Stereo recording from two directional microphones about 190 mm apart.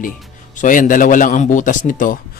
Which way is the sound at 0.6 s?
45° left (ahead or behind).